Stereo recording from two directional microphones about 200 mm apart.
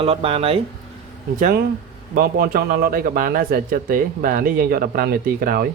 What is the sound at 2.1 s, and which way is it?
Speech, 45° right (ahead or behind).